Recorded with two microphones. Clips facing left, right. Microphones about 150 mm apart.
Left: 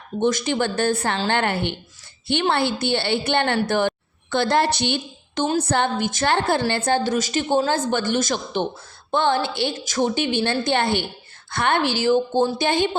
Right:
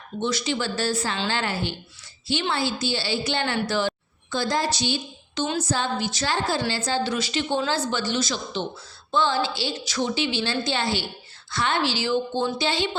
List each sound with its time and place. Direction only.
0.2 s a woman's voice: 50° left (ahead or behind)